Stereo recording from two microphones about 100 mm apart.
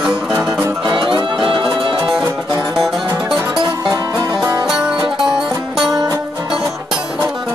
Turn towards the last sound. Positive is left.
turn(degrees=-35)  # may be behind; listen again after turning